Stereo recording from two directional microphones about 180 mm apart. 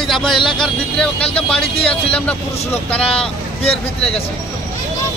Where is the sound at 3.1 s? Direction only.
30° left (ahead or behind).